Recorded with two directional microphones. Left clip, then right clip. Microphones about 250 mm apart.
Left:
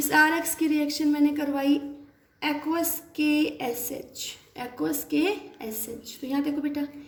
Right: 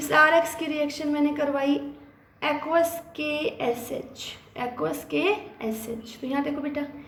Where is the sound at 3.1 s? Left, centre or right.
Left.